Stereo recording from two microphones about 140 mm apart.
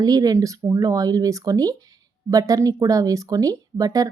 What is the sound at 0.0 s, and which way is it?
Speech, 25° right (ahead or behind).